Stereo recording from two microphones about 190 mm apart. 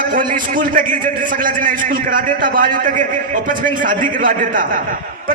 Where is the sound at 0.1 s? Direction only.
45° right (ahead or behind).